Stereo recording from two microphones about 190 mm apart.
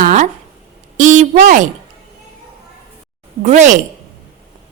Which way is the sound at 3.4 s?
40° right (ahead or behind).